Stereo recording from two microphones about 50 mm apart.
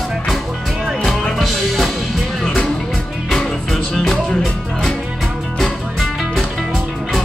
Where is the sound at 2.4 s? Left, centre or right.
Centre.